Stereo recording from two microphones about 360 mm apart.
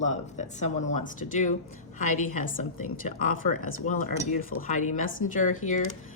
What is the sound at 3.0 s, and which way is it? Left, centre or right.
Speech, left.